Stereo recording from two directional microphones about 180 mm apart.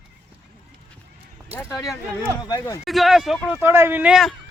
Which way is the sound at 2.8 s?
Centre (ahead or behind).